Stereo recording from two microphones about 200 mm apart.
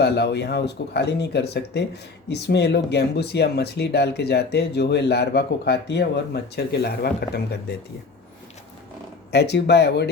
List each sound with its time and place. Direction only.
0.0 s speech: 55° left (ahead or behind)
9.3 s speech: 55° left (ahead or behind)